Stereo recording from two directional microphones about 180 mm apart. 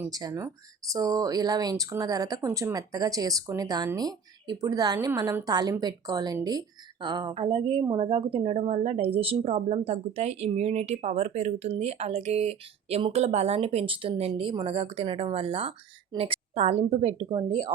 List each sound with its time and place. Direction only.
0.0 s a woman's voice: 20° right (ahead or behind)